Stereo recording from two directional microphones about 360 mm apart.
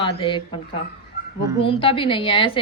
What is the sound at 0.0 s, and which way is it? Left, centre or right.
Speech, centre.